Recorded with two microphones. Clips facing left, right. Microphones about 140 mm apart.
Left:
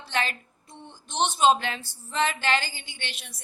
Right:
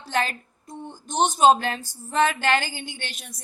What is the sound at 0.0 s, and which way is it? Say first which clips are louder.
Speech: right 3 dB; 45° right (ahead or behind).